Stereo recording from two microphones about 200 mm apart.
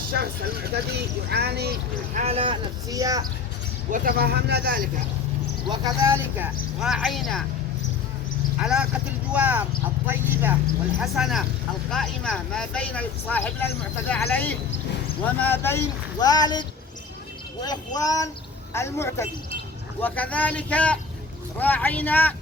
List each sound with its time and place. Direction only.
0.1 s speech: 50° right (ahead or behind)
2.1 s speech: 30° right (ahead or behind)
3.9 s speech: 50° right (ahead or behind)
5.6 s speech: 20° right (ahead or behind)
6.7 s speech: centre (ahead or behind)
8.6 s speech: 5° right (ahead or behind)
11.0 s speech: centre (ahead or behind)